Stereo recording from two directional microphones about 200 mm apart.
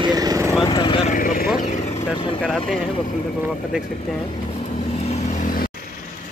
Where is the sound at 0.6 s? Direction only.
25° left (ahead or behind).